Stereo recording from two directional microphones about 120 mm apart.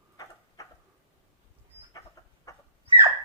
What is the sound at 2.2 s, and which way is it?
Chicken, 30° left (ahead or behind).